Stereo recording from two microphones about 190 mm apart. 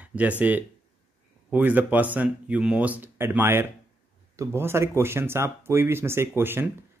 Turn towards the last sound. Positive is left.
turn(degrees=-10)  # may be behind; listen again after turning